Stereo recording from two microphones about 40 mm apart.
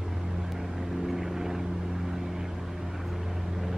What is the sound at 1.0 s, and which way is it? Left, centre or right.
Vehicle, centre.